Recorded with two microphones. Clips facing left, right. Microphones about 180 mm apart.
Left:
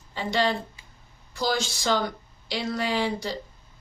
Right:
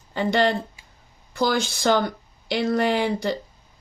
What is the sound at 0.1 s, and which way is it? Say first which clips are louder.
A woman's voice: right 5 dB; 55° right (ahead or behind).